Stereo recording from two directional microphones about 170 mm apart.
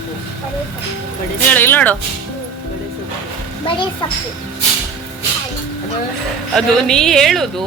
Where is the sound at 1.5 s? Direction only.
10° left (ahead or behind).